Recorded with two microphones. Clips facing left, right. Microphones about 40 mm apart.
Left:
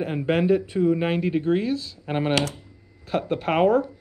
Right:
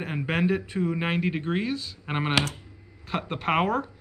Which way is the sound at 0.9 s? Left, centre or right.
Centre.